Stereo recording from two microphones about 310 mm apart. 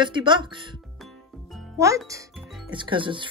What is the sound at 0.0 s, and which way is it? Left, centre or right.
Speech, centre.